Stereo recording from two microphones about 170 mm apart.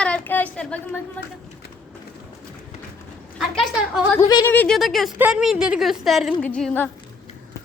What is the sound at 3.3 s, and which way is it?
A woman's voice, centre (ahead or behind).